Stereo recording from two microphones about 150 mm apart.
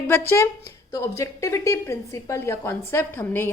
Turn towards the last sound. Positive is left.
turn(degrees=15)  # may be behind; listen again after turning